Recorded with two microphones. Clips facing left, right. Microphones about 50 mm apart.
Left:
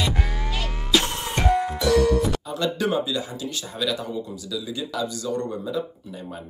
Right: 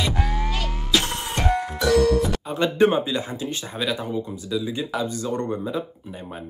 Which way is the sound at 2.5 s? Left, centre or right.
Right.